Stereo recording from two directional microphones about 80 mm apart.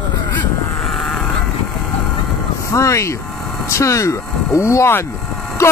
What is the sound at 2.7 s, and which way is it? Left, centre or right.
Speech, left.